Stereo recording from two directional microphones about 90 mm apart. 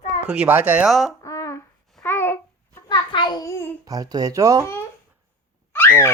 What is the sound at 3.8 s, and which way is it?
Speech, 45° right (ahead or behind).